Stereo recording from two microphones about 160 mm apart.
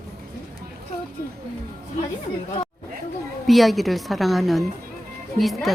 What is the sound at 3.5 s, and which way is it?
A woman's voice, centre (ahead or behind).